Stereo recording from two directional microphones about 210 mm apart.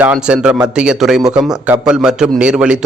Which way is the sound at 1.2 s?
20° right (ahead or behind).